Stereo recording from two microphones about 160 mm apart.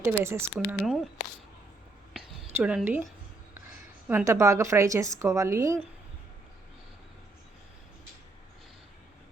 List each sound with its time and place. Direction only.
0.0 s speech: 15° right (ahead or behind)
0.7 s speech: 5° right (ahead or behind)
2.6 s speech: 10° right (ahead or behind)
4.1 s a woman's voice: 15° right (ahead or behind)